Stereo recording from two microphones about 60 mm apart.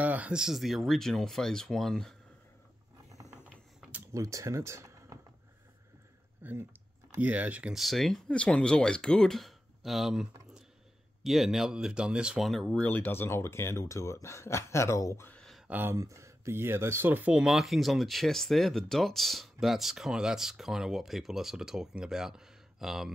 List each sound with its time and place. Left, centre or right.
0.0 s a sound: right
0.4 s speech: centre
4.1 s speech: right
6.5 s typing: right
7.2 s speech: right
7.7 s speech: centre
8.3 s speech: centre
12.6 s speech: left
15.9 s speech: right
17.3 s speech: centre
17.6 s speech: centre